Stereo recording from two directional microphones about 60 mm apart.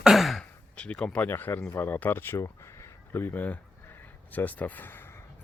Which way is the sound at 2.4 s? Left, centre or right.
Left.